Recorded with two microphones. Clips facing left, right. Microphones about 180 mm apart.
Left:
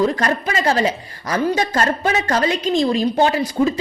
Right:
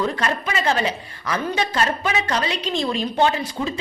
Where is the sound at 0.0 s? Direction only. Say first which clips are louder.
Left 5 dB; 40° left (ahead or behind).